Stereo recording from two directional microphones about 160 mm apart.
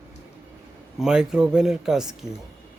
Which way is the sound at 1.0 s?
5° right (ahead or behind).